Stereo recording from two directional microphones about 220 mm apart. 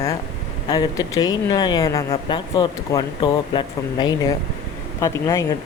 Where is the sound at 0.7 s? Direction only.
15° left (ahead or behind).